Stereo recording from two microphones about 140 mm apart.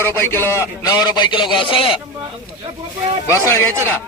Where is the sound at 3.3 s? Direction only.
20° left (ahead or behind).